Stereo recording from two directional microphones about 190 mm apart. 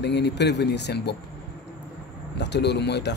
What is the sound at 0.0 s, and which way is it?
Speech, 65° left (ahead or behind).